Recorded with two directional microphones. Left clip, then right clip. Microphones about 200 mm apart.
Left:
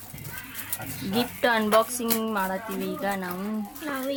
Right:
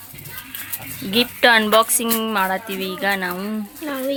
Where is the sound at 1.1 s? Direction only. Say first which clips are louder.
Right 9 dB; 15° right (ahead or behind).